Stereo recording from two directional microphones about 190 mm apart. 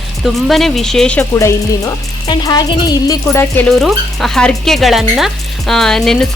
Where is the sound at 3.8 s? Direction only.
Centre (ahead or behind).